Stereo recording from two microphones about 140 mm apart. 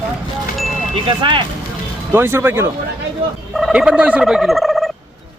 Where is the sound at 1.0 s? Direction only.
35° right (ahead or behind).